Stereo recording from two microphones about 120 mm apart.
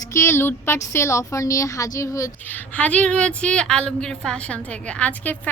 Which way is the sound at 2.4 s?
15° left (ahead or behind).